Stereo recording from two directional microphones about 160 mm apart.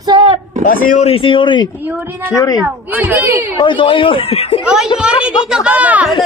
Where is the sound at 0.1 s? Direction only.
30° right (ahead or behind).